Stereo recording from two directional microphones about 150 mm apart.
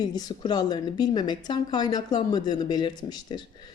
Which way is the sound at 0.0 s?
25° left (ahead or behind).